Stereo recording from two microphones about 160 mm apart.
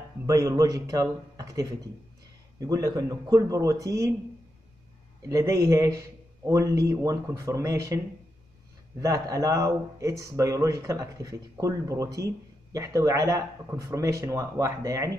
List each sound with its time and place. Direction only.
0.3 s speech: 20° right (ahead or behind)
5.3 s speech: 20° right (ahead or behind)
9.0 s speech: 20° right (ahead or behind)